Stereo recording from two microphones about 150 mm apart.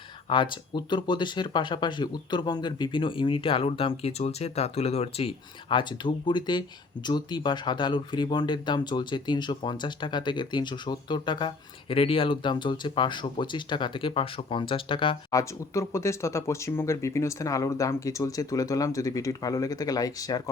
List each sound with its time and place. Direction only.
0.3 s speech: 30° left (ahead or behind)
15.3 s speech: 20° left (ahead or behind)